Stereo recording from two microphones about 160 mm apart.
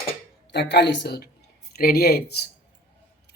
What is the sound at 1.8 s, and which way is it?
Speech, 70° left (ahead or behind).